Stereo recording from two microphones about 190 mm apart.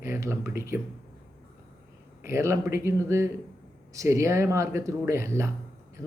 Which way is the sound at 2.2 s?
15° right (ahead or behind).